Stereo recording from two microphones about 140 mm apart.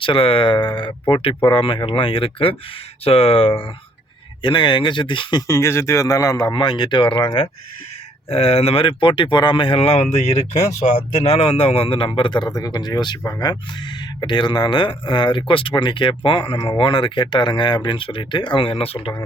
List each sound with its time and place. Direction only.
0.0 s speech: 40° left (ahead or behind)
5.5 s speech: 20° left (ahead or behind); by 19.2 s 40° left (ahead or behind)